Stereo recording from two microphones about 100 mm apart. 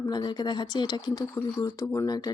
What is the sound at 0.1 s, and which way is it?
Speech, 45° left (ahead or behind).